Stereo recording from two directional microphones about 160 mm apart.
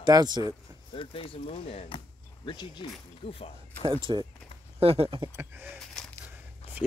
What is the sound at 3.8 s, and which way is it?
Speech, 30° right (ahead or behind).